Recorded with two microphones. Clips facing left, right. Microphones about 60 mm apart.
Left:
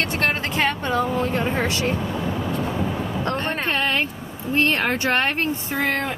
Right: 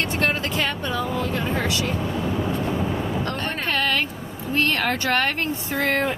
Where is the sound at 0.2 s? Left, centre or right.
Left.